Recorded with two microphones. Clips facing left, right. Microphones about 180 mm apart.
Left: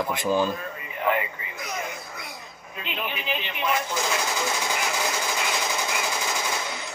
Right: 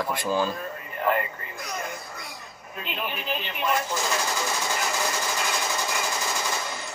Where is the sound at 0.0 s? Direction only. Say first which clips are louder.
Left 2 dB; 20° left (ahead or behind).